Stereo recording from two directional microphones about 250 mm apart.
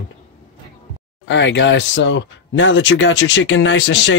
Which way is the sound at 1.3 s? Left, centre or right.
Left.